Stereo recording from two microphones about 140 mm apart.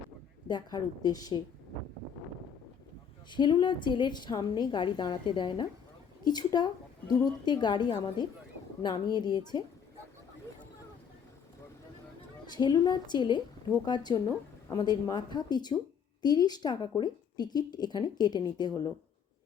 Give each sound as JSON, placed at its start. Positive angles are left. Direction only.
{"t": 0.4, "sound": "a woman's voice", "side_deg": 30}
{"t": 3.2, "sound": "a woman's voice", "side_deg": 35}
{"t": 12.5, "sound": "a woman's voice", "side_deg": 30}